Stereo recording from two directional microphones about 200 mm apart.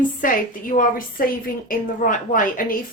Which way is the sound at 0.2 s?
45° left (ahead or behind).